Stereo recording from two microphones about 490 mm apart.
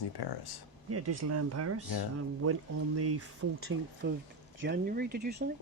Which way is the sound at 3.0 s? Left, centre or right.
Right.